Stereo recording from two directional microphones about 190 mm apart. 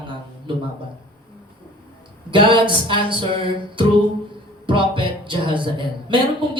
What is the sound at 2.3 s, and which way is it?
Speech, 25° right (ahead or behind).